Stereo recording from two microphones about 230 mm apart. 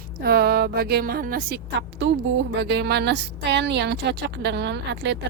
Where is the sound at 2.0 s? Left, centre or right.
Right.